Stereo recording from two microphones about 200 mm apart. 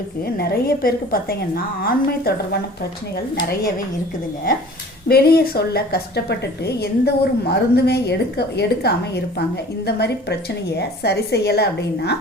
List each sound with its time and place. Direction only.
0.3 s a woman's voice: 50° left (ahead or behind)
5.0 s a woman's voice: 50° left (ahead or behind)